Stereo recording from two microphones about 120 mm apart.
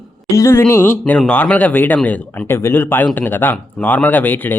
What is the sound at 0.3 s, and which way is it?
Speech, 25° left (ahead or behind).